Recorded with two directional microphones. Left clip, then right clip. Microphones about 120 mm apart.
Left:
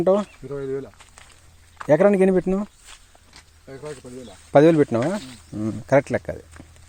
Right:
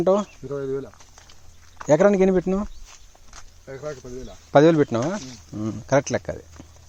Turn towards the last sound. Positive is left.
turn(degrees=5)  # may be behind; listen again after turning